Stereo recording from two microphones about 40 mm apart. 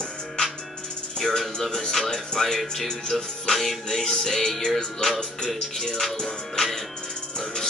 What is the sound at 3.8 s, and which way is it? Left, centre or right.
Music, centre.